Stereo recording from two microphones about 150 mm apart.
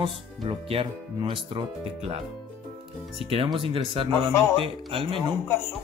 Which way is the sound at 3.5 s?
35° right (ahead or behind).